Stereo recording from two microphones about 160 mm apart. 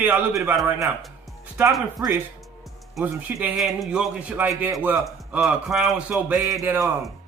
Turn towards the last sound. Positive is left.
turn(degrees=-15)  # may be behind; listen again after turning